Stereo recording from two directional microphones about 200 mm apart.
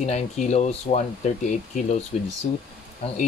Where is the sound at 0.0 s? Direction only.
35° left (ahead or behind).